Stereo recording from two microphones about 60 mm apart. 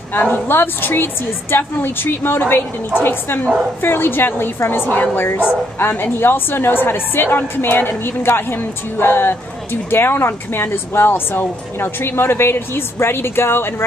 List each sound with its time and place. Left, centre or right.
0.1 s a woman's voice: left